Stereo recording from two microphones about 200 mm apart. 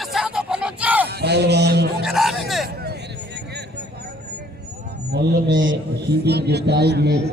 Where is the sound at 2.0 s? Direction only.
Centre (ahead or behind).